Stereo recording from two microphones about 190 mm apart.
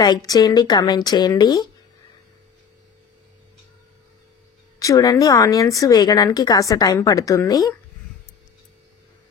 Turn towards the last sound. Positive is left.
turn(degrees=15)  # may be behind; listen again after turning